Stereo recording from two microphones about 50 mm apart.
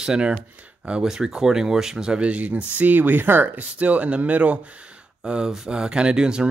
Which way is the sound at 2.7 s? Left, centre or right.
Right.